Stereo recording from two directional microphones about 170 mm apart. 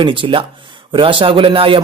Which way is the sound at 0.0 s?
30° right (ahead or behind).